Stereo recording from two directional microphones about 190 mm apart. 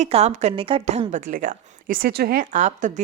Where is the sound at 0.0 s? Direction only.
35° right (ahead or behind).